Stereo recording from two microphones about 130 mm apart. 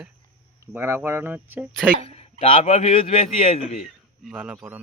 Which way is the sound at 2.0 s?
55° left (ahead or behind).